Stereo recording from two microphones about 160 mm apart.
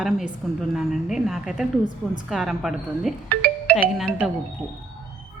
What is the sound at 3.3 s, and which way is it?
Music, 65° right (ahead or behind).